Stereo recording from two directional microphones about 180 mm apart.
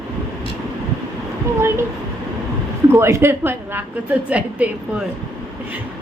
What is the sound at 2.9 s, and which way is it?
A woman's voice, 15° right (ahead or behind).